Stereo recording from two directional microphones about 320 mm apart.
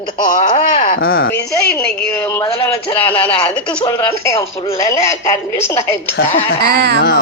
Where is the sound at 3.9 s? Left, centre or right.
Centre.